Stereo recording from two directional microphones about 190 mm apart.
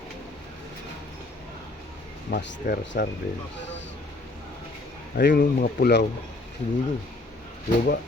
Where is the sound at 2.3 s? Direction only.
55° left (ahead or behind).